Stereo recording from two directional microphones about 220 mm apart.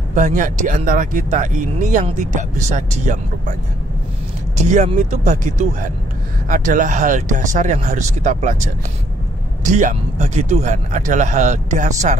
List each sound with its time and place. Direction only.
0.1 s speech: 35° right (ahead or behind)
4.6 s speech: 30° right (ahead or behind)
9.7 s speech: 35° right (ahead or behind)